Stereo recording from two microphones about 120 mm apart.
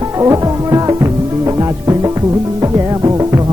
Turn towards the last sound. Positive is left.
turn(degrees=-30)  # may be behind; listen again after turning